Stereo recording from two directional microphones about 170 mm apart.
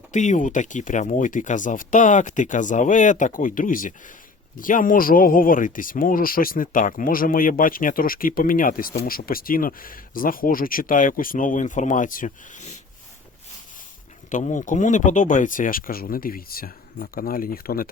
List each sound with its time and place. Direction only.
0.1 s speech: 45° left (ahead or behind)
14.3 s speech: 45° left (ahead or behind)